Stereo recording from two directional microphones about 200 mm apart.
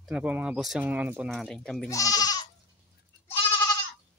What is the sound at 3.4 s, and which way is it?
Goat, 20° left (ahead or behind).